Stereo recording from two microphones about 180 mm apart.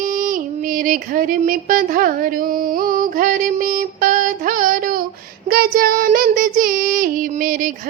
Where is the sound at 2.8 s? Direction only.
50° right (ahead or behind).